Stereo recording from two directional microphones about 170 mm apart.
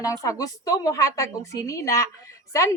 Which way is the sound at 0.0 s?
20° left (ahead or behind).